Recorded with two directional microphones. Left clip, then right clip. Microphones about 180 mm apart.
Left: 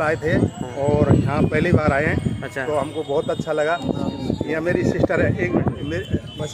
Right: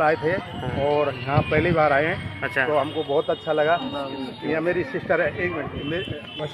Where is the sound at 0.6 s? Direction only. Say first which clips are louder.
Right 2 dB; 5° left (ahead or behind).